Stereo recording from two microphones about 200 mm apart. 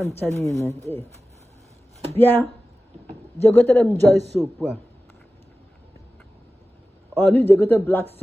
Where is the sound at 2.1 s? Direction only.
10° left (ahead or behind).